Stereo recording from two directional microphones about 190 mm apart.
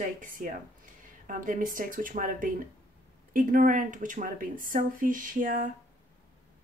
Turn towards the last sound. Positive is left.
turn(degrees=-45)  # may be behind; listen again after turning